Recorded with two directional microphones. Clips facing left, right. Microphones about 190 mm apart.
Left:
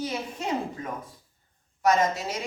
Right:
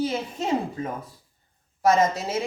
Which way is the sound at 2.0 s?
25° right (ahead or behind).